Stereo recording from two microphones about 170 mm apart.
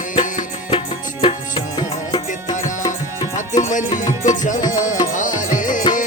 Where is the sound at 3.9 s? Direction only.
25° left (ahead or behind).